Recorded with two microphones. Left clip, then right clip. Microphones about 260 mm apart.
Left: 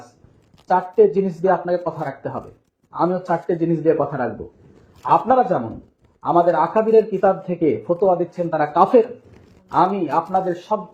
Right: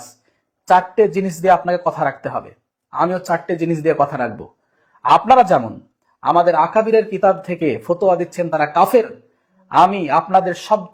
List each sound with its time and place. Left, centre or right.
0.7 s speech: right